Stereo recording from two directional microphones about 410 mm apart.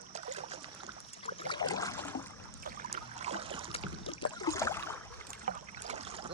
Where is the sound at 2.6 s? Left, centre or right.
Centre.